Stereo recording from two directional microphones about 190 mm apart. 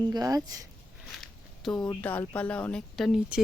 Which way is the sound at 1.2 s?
Centre (ahead or behind).